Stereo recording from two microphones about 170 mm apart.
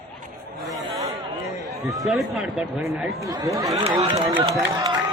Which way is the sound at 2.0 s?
Centre (ahead or behind).